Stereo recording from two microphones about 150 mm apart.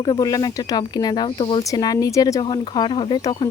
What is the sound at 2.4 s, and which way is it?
Speech, 30° left (ahead or behind).